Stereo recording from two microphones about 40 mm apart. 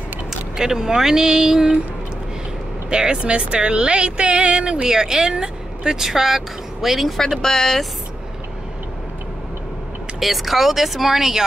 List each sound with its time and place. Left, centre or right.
0.6 s speech: centre
2.9 s speech: right
4.8 s speech: centre
7.2 s speech: centre
10.2 s speech: centre